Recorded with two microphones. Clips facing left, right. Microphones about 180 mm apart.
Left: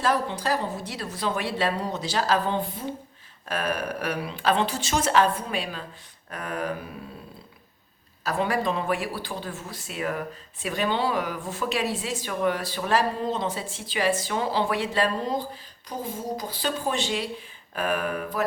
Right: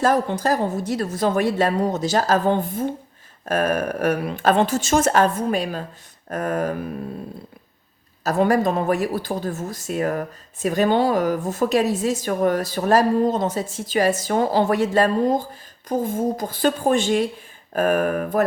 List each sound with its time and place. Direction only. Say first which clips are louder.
0.0 s speech: right 6 dB; 45° right (ahead or behind)
8.2 s speech: right 7 dB; 45° right (ahead or behind)